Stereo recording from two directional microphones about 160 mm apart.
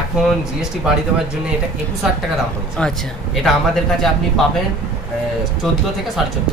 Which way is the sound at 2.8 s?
5° left (ahead or behind).